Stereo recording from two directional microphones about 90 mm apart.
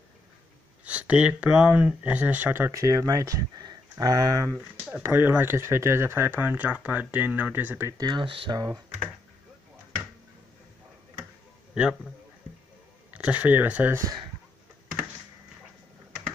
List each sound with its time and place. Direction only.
0.8 s speech: 15° right (ahead or behind)
2.7 s speech: 40° right (ahead or behind)
5.0 s speech: 25° right (ahead or behind)
8.0 s speech: 60° right (ahead or behind)
8.5 s speech: 45° right (ahead or behind)
13.1 s speech: 15° right (ahead or behind)